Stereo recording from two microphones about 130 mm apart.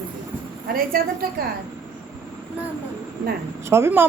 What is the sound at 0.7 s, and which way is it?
Speech, 90° right.